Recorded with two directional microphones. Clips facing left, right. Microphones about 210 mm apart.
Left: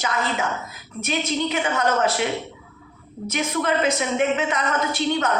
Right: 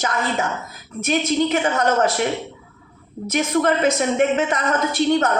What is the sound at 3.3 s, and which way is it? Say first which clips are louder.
A woman's voice: right 4 dB; 45° right (ahead or behind).